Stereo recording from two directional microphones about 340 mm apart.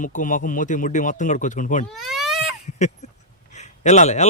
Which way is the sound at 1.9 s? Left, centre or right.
Centre.